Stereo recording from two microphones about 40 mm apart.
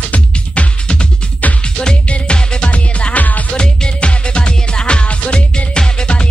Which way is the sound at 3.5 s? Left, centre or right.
Left.